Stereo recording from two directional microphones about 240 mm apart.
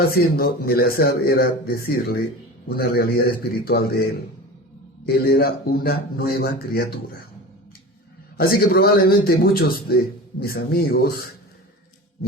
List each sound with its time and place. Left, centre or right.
0.1 s a man's voice: left
5.0 s a man's voice: left
8.4 s a man's voice: left